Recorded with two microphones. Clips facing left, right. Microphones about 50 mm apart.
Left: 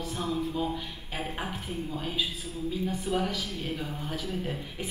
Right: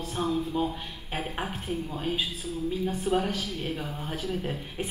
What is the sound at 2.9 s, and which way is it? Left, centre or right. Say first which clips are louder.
Speech: right 3 dB; right.